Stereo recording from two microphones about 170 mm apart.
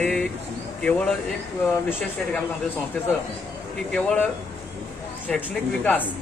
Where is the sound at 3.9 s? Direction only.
5° left (ahead or behind).